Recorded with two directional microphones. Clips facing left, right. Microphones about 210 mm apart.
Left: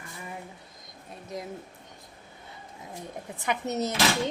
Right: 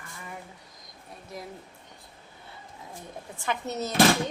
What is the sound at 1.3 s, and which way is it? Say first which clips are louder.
Child singing: left 3 dB; 20° left (ahead or behind).